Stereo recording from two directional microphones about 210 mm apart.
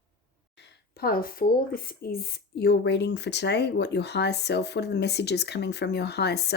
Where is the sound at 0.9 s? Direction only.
45° left (ahead or behind).